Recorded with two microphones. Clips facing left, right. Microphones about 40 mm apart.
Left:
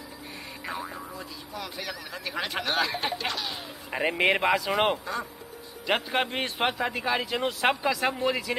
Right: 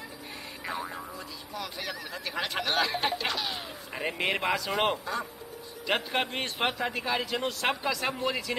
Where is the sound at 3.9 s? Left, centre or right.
Left.